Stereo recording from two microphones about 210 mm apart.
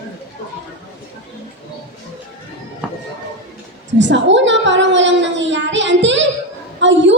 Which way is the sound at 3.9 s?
60° right (ahead or behind).